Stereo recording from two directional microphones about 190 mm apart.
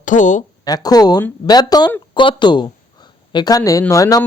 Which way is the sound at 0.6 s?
20° left (ahead or behind).